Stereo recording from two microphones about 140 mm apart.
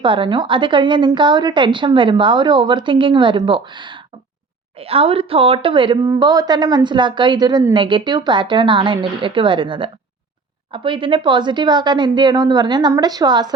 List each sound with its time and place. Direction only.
0.0 s a woman's voice: 35° right (ahead or behind)
4.8 s a woman's voice: 45° right (ahead or behind)